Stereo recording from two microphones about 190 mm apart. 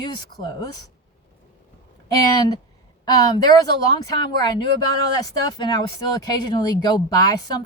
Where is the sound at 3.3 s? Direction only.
20° left (ahead or behind).